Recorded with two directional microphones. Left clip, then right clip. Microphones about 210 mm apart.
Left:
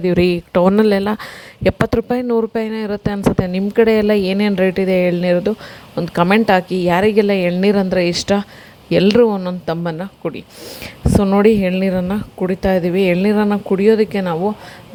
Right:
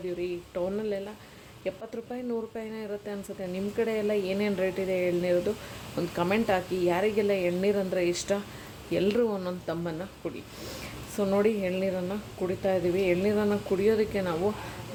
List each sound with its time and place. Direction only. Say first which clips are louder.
0.0 s a woman's voice: left 17 dB; 50° left (ahead or behind)